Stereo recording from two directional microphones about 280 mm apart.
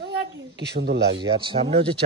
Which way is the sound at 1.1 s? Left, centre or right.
Centre.